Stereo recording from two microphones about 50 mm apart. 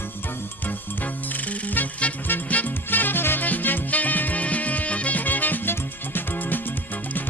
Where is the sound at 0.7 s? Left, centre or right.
Left.